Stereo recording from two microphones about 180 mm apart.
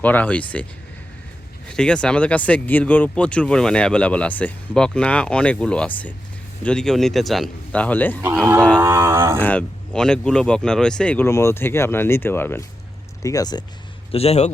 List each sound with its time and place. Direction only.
0.0 s speech: 10° left (ahead or behind)
1.6 s speech: 5° left (ahead or behind)
8.2 s a sound: 10° right (ahead or behind)
9.4 s speech: 5° left (ahead or behind); by 13.7 s 20° left (ahead or behind)
14.1 s a man's voice: 35° left (ahead or behind)